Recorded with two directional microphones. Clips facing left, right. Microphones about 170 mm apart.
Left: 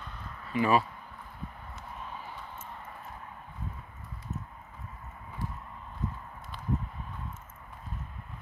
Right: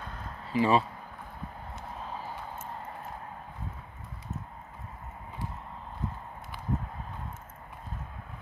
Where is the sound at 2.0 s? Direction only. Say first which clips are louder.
Right 3 dB; 35° right (ahead or behind).